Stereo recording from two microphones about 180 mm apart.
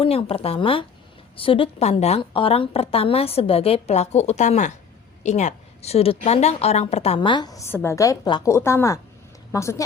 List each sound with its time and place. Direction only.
0.0 s a woman's voice: 30° left (ahead or behind)